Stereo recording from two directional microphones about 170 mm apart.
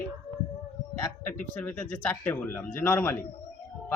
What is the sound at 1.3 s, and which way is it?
A man's voice, 10° left (ahead or behind).